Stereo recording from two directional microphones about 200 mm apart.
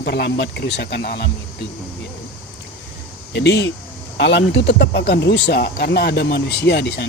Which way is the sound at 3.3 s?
60° left (ahead or behind).